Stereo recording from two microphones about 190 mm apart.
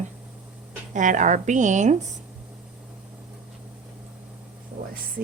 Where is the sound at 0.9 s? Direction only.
40° right (ahead or behind).